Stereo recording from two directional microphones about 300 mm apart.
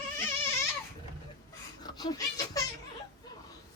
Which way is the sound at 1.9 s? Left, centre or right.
Centre.